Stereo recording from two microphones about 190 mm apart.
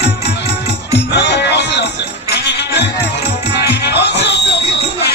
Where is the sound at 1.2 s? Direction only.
65° left (ahead or behind).